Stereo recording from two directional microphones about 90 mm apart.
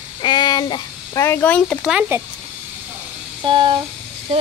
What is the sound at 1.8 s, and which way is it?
Speech, 10° right (ahead or behind).